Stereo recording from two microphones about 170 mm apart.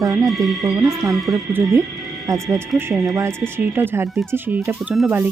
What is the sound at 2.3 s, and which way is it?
Speech, 20° right (ahead or behind).